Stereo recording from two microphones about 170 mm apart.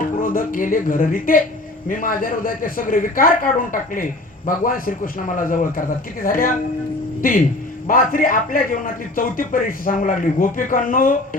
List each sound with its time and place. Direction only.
0.0 s a man's voice: 55° left (ahead or behind)